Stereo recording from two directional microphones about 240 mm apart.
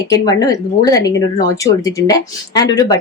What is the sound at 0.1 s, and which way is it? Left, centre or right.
A woman's voice, centre.